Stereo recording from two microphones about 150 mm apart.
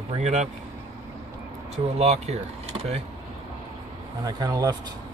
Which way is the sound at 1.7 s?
50° right (ahead or behind).